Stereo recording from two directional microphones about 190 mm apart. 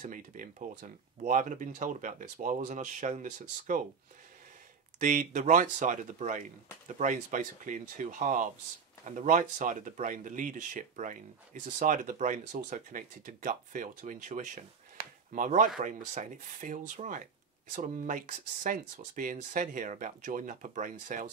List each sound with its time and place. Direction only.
0.0 s speech: 40° right (ahead or behind)
5.0 s speech: 40° right (ahead or behind)